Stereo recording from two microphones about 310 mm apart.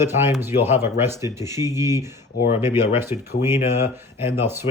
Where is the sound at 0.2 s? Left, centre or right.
Centre.